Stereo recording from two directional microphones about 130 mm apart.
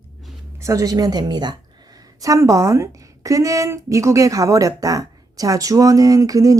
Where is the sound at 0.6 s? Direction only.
25° right (ahead or behind).